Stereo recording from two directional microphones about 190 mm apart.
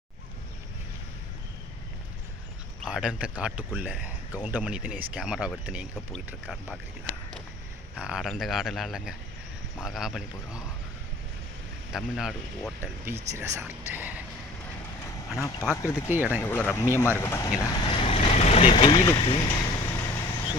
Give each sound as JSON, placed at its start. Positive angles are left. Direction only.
{"t": 2.8, "sound": "speech", "side_deg": -5}
{"t": 11.9, "sound": "speech", "side_deg": 0}
{"t": 15.7, "sound": "speech", "side_deg": 15}
{"t": 16.0, "sound": "speech", "side_deg": -10}
{"t": 16.4, "sound": "speech", "side_deg": 10}
{"t": 19.5, "sound": "vehicle", "side_deg": 15}